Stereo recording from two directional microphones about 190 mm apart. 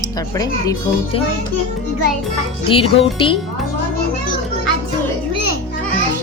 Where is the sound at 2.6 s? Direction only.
30° left (ahead or behind).